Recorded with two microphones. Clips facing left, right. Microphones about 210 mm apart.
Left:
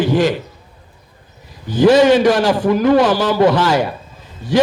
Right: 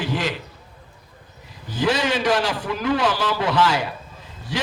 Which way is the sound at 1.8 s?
45° left (ahead or behind).